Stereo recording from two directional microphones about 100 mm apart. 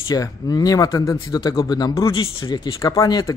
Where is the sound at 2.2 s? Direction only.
55° left (ahead or behind).